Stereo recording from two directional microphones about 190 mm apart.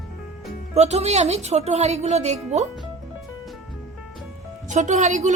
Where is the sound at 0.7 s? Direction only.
35° right (ahead or behind).